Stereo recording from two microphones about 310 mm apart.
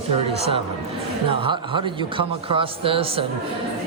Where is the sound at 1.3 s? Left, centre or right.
Centre.